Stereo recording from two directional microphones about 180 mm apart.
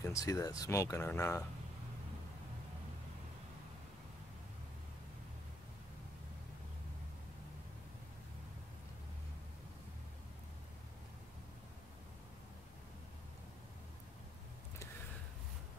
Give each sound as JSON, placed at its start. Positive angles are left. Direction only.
{"t": 0.0, "sound": "speech", "side_deg": 20}